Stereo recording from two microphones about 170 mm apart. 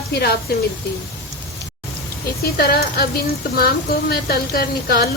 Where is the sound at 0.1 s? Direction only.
70° left (ahead or behind).